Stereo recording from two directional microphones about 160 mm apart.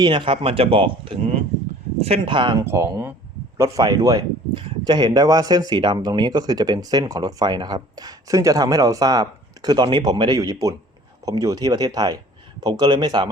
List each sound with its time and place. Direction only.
0.0 s speech: 30° right (ahead or behind)
2.6 s speech: 15° right (ahead or behind)